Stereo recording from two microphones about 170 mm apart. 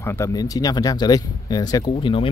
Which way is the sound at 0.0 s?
15° left (ahead or behind).